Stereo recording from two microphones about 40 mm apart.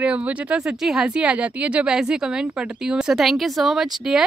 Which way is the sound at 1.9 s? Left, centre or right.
Centre.